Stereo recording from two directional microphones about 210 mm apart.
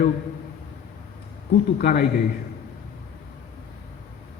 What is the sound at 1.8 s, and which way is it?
Speech, 45° left (ahead or behind).